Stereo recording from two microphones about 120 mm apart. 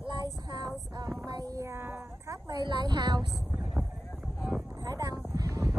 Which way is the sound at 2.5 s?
35° right (ahead or behind).